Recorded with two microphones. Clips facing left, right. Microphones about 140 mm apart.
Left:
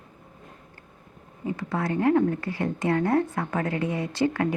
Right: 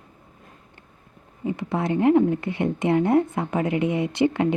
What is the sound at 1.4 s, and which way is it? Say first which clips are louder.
A woman's voice: right 3 dB; 20° right (ahead or behind).